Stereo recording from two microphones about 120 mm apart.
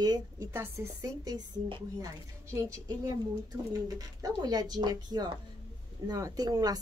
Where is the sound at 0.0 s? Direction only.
30° right (ahead or behind).